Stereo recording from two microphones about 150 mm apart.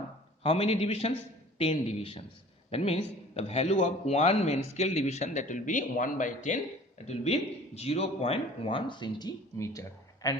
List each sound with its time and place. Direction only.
0.4 s a man's voice: 40° left (ahead or behind); by 6.6 s 55° left (ahead or behind)
7.0 s speech: 45° left (ahead or behind); by 9.8 s 20° left (ahead or behind)